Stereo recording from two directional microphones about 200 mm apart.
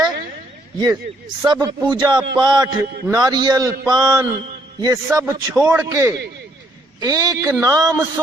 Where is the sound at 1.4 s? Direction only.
20° right (ahead or behind).